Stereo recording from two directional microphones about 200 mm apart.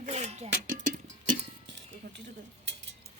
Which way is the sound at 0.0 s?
35° right (ahead or behind).